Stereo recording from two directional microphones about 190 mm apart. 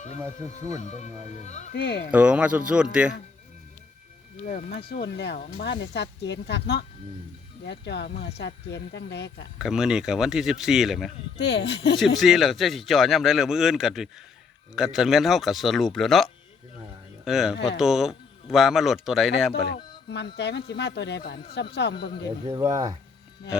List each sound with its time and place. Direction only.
0.8 s speech: 40° left (ahead or behind)
1.7 s speech: 55° left (ahead or behind)
2.0 s speech: 5° right (ahead or behind)
4.4 s speech: 45° left (ahead or behind)
4.9 s speech: 55° left (ahead or behind)
5.4 s speech: 45° left (ahead or behind)
5.6 s speech: 60° left (ahead or behind)
9.6 s speech: 5° right (ahead or behind)
11.3 s speech: 60° left (ahead or behind)
11.9 s speech: centre (ahead or behind)
19.6 s speech: 60° left (ahead or behind)
22.4 s speech: 20° right (ahead or behind)